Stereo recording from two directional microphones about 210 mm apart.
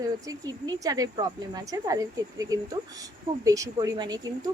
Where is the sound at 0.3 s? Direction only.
20° right (ahead or behind).